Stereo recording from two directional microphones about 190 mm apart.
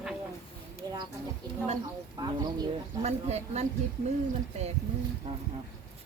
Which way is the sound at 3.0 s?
35° right (ahead or behind).